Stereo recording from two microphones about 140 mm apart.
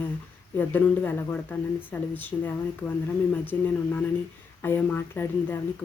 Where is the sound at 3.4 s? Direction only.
15° left (ahead or behind).